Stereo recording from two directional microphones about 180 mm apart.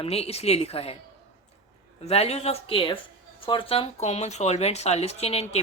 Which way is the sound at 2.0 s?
35° left (ahead or behind).